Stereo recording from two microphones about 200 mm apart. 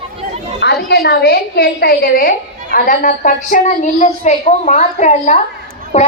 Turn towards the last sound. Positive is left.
turn(degrees=35)  # may be behind; listen again after turning